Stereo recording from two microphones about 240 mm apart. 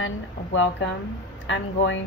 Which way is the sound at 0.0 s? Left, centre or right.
Left.